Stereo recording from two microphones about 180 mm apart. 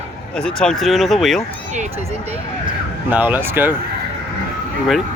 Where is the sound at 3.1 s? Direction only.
10° right (ahead or behind).